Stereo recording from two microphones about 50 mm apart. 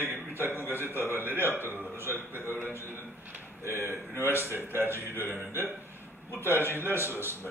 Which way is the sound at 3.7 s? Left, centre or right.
Right.